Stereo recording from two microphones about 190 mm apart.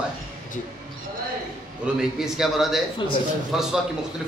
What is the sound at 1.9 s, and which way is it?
A man's voice, centre (ahead or behind).